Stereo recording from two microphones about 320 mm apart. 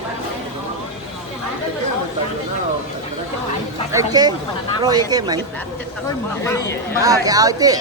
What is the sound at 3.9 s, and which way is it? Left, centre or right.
Speech, centre.